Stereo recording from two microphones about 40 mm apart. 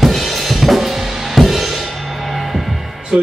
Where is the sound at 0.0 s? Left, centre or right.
Centre.